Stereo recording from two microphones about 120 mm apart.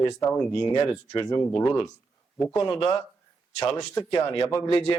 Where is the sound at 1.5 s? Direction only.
45° left (ahead or behind).